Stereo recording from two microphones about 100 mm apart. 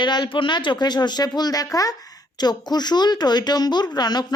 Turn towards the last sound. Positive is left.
turn(degrees=45)  # may be behind; listen again after turning